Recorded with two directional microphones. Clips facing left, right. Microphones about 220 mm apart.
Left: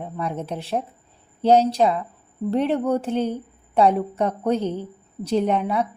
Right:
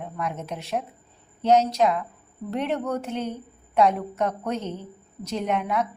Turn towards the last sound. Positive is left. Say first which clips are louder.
# left 5 dB
turn(degrees=30)  # may be behind; listen again after turning